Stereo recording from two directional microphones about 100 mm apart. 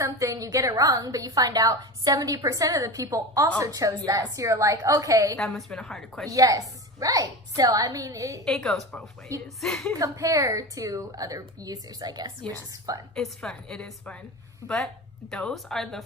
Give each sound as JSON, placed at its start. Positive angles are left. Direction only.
{"t": 0.0, "sound": "a woman's voice", "side_deg": -35}
{"t": 5.4, "sound": "a woman's voice", "side_deg": 0}
{"t": 6.3, "sound": "a woman's voice", "side_deg": -35}
{"t": 8.4, "sound": "a woman's voice", "side_deg": 5}
{"t": 10.0, "sound": "a woman's voice", "side_deg": -35}
{"t": 13.1, "sound": "a woman's voice", "side_deg": 5}
{"t": 15.3, "sound": "a woman's voice", "side_deg": 5}